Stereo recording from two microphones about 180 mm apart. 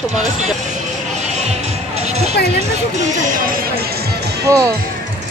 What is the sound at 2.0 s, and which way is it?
Music, 35° right (ahead or behind).